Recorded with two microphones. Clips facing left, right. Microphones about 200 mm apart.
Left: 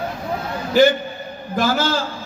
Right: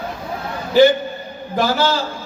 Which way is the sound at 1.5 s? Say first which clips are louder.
Right 2 dB; 45° left (ahead or behind).